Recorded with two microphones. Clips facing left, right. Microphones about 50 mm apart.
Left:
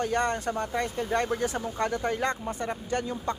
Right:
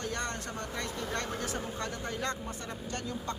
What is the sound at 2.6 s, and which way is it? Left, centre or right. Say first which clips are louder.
Speech: left 8 dB; left.